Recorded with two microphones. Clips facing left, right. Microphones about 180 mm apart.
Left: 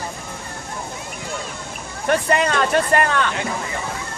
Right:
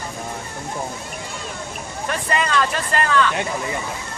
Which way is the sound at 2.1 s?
60° left (ahead or behind).